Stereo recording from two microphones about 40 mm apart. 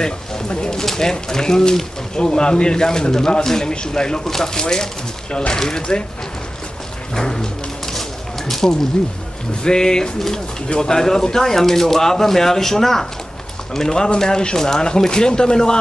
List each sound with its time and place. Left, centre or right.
0.0 s speech: centre
7.2 s music: centre
8.5 s a sound: centre
9.6 s speech: centre